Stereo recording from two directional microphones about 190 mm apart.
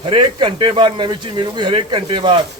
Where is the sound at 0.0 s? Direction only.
25° right (ahead or behind).